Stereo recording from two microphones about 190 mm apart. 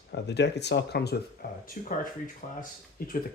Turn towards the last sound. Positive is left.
turn(degrees=50)  # may be behind; listen again after turning